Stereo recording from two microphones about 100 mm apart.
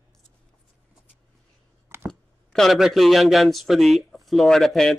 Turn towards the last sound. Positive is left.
turn(degrees=0)  # may be behind; listen again after turning